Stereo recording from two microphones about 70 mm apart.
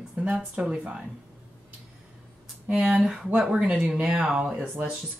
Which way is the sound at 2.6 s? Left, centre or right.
Centre.